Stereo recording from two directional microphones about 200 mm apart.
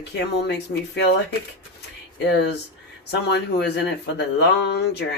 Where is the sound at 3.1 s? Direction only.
55° left (ahead or behind).